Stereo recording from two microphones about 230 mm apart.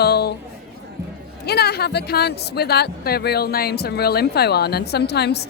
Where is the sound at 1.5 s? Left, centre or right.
Left.